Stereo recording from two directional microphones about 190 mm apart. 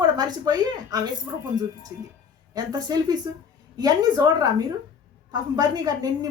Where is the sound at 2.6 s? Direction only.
20° right (ahead or behind).